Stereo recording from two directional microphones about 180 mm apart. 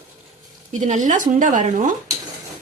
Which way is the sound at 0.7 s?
45° right (ahead or behind).